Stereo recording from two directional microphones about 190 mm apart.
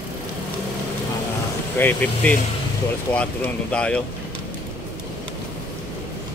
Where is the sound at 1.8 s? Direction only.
10° left (ahead or behind).